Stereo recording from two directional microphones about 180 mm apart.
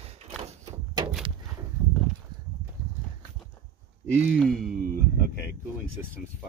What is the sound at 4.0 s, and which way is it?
Speech, 5° left (ahead or behind).